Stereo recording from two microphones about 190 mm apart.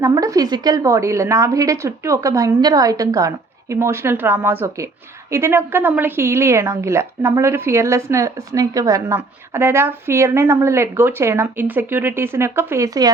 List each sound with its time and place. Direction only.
0.0 s a woman's voice: 15° right (ahead or behind)